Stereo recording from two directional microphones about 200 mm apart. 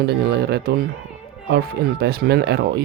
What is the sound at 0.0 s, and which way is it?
Speech, 50° right (ahead or behind).